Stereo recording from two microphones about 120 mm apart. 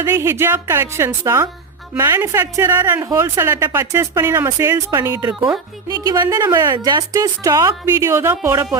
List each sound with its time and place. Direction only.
0.0 s speech: 20° right (ahead or behind)
6.7 s speech: 40° right (ahead or behind)
8.1 s speech: 20° right (ahead or behind)